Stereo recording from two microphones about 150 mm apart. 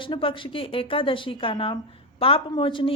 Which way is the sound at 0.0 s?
35° left (ahead or behind).